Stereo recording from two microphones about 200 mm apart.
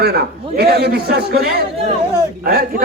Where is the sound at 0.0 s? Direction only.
55° right (ahead or behind).